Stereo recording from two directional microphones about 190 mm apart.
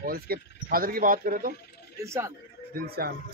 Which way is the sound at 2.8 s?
55° right (ahead or behind).